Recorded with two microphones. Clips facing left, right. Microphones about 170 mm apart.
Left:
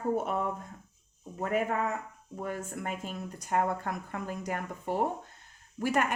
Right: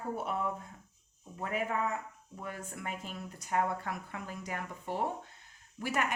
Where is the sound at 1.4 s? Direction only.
45° left (ahead or behind).